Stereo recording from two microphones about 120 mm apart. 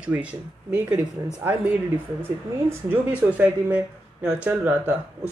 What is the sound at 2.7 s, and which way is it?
Speech, 15° right (ahead or behind).